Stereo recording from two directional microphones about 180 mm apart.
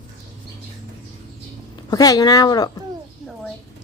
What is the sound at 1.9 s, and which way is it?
Speech, 20° left (ahead or behind).